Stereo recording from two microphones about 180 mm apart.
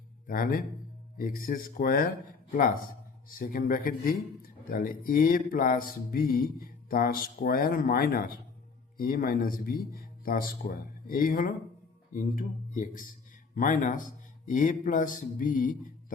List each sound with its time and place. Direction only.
0.3 s speech: 50° left (ahead or behind)